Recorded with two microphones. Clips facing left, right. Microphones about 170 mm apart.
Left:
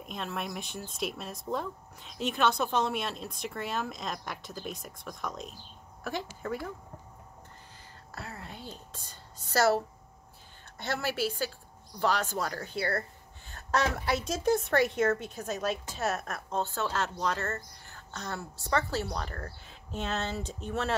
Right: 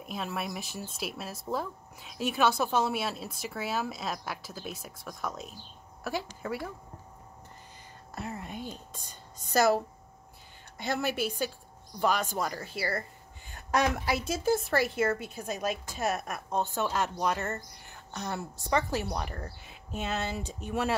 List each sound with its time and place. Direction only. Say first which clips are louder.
0.0 s a woman's voice: right 1 dB; 5° right (ahead or behind)
8.1 s a woman's voice: right 5 dB; 15° right (ahead or behind)
10.8 s a woman's voice: right 1 dB; 15° right (ahead or behind)